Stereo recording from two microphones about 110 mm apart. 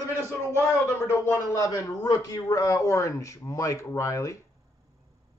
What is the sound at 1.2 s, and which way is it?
A man's voice, 20° left (ahead or behind).